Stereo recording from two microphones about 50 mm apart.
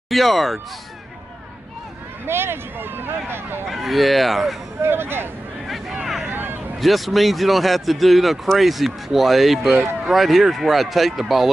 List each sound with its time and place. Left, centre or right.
0.1 s speech: centre
2.2 s speech: right
3.6 s speech: centre
4.8 s speech: right
6.3 s a sound: right
6.8 s speech: centre